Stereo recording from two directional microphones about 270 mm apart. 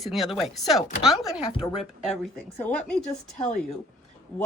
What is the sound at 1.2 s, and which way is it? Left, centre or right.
Speech, centre.